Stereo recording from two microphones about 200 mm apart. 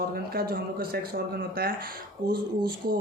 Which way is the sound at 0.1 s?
50° right (ahead or behind).